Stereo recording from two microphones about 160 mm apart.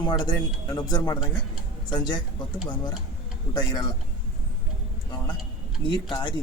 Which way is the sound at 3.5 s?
25° left (ahead or behind).